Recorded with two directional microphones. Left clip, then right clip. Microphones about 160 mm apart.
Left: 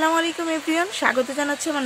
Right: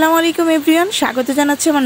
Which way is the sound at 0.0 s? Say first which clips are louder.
Right 8 dB; 55° right (ahead or behind).